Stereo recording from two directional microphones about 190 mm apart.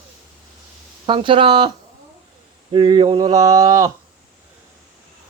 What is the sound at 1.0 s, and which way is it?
Speech, 25° right (ahead or behind).